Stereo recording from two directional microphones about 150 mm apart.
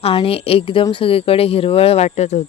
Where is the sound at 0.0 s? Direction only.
40° left (ahead or behind).